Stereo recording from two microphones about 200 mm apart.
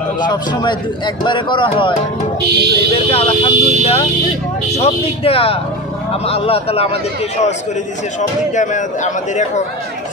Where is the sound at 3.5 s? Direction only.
35° right (ahead or behind).